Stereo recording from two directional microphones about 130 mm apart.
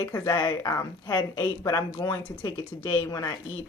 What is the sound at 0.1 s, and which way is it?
Speech, 30° left (ahead or behind).